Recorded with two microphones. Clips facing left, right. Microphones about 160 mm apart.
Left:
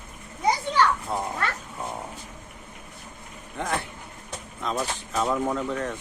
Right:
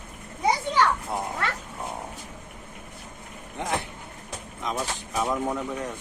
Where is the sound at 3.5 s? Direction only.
20° right (ahead or behind).